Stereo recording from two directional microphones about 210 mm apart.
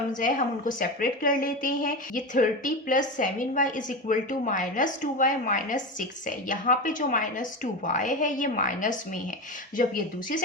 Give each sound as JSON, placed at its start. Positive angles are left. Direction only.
{"t": 0.2, "sound": "speech", "side_deg": 40}